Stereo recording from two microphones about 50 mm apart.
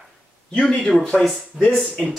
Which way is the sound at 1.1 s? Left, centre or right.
Centre.